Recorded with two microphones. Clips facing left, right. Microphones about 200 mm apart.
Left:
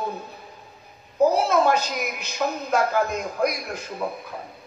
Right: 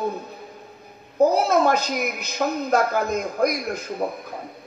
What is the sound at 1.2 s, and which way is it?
A woman's voice, 40° right (ahead or behind).